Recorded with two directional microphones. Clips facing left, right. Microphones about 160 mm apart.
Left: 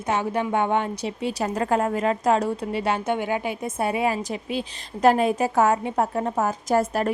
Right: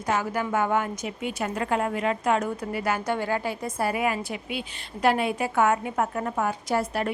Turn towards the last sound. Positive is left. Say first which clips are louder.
# left 4 dB
turn(degrees=45)  # may be behind; listen again after turning